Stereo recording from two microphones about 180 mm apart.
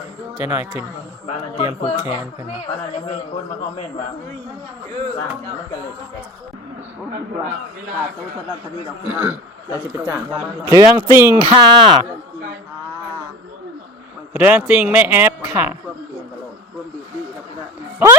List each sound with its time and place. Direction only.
0.3 s speech: 10° right (ahead or behind)
1.3 s speech: 25° left (ahead or behind)
9.0 s speech: 10° right (ahead or behind)
10.7 s speech: 15° right (ahead or behind)
11.4 s speech: 25° right (ahead or behind)
14.3 s speech: 10° right (ahead or behind)